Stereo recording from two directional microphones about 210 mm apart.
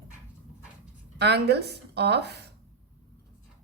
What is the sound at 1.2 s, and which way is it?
A woman's voice, 50° right (ahead or behind).